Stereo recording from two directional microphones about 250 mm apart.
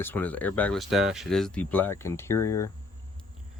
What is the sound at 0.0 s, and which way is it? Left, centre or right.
Speech, centre.